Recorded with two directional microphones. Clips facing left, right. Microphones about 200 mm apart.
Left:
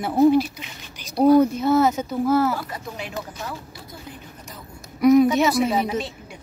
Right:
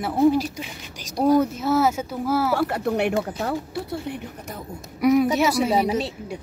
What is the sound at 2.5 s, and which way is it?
Speech, 65° right (ahead or behind).